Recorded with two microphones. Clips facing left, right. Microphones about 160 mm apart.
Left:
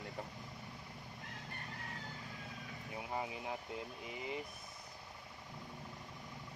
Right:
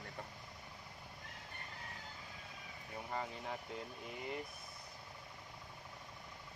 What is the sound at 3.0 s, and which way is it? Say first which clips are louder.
Speech: left 1 dB; 10° left (ahead or behind).